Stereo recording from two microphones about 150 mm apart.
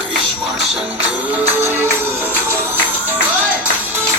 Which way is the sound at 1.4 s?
15° right (ahead or behind).